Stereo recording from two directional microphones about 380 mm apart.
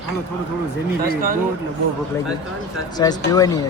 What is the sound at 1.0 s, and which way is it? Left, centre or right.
Speech, right.